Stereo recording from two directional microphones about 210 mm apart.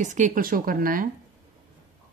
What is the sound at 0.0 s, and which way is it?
Speech, 35° right (ahead or behind).